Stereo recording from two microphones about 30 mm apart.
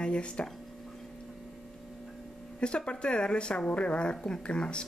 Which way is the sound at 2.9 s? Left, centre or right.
Left.